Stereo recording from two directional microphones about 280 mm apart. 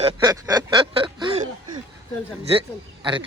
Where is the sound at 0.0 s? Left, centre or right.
Centre.